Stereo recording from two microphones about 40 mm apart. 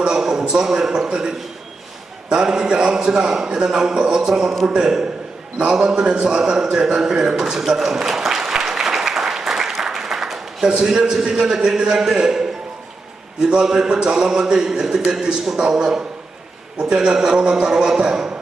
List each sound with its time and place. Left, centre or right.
0.2 s a man's voice: centre
4.6 s music: right
6.2 s a man's voice: right
7.7 s applause: centre
10.7 s music: centre
11.2 s a man's voice: centre
15.5 s music: centre
16.8 s a man's voice: centre
17.3 s music: right